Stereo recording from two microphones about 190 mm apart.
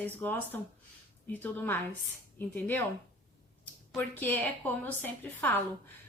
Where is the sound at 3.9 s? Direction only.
10° left (ahead or behind).